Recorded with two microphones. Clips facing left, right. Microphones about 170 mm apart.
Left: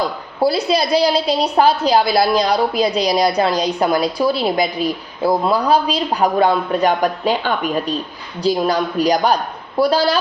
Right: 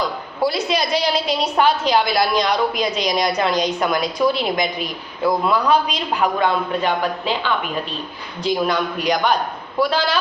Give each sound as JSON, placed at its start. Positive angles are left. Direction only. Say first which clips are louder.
{"t": 0.4, "sound": "a woman's voice", "louder": "left 4 dB", "side_deg": 35}